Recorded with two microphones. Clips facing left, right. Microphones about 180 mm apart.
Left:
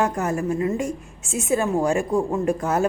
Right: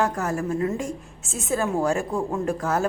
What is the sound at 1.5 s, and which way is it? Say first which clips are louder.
Speech: left 2 dB; 15° left (ahead or behind).